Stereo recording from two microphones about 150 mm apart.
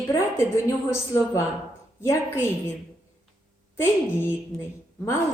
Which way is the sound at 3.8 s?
15° left (ahead or behind).